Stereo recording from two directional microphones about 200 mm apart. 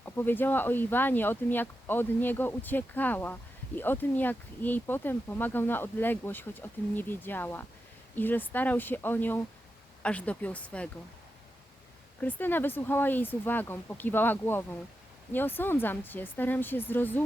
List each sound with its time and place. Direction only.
0.0 s speech: 10° left (ahead or behind)
12.2 s speech: 10° left (ahead or behind)